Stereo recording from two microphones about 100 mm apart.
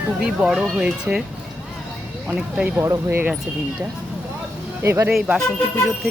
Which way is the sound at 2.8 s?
30° right (ahead or behind).